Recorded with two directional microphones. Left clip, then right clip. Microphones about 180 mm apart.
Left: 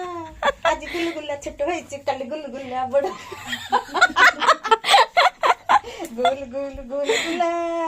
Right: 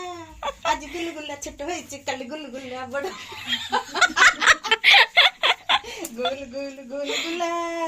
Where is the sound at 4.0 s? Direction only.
45° left (ahead or behind).